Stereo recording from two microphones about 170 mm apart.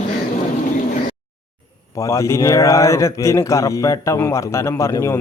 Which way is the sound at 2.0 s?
15° left (ahead or behind).